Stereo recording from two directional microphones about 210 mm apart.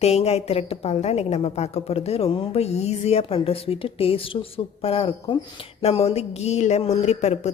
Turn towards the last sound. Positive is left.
turn(degrees=30)  # may be behind; listen again after turning